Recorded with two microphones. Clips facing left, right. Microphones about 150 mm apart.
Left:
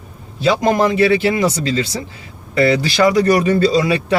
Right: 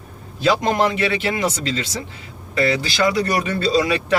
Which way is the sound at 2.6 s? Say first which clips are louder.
Left 5 dB; 40° left (ahead or behind).